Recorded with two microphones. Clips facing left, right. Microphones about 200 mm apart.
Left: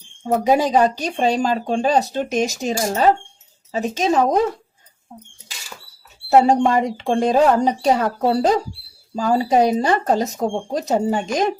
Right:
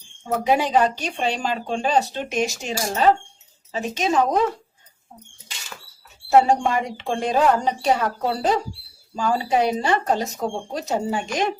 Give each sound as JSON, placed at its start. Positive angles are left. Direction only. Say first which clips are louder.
{"t": 0.3, "sound": "speech", "louder": "left 4 dB", "side_deg": 40}
{"t": 6.3, "sound": "speech", "louder": "left 3 dB", "side_deg": 35}